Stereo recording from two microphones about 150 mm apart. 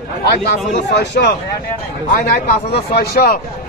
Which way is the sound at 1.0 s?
90° left.